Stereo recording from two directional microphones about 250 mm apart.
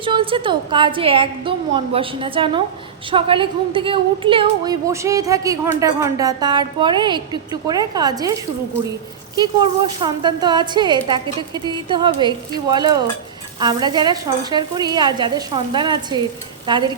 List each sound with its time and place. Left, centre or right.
0.0 s a woman's voice: right
10.0 s a woman's voice: centre